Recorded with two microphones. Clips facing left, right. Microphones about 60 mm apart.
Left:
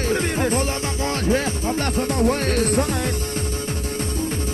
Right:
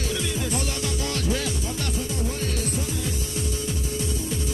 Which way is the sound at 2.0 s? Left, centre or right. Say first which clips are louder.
Left 12 dB; left.